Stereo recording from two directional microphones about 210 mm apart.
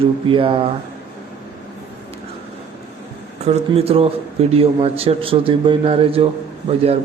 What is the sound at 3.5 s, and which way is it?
A man's voice, 30° right (ahead or behind).